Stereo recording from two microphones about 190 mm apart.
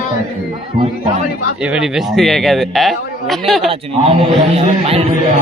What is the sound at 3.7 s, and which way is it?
Music, 30° right (ahead or behind).